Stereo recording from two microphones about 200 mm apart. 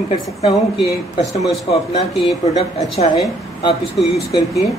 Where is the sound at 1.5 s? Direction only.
30° left (ahead or behind).